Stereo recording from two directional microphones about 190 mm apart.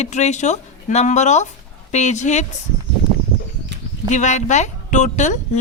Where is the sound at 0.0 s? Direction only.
35° left (ahead or behind).